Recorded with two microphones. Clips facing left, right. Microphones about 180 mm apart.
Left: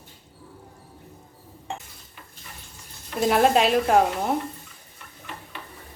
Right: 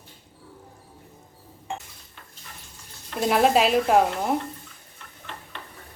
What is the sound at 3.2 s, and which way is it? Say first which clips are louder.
Speech: left 1 dB; centre (ahead or behind).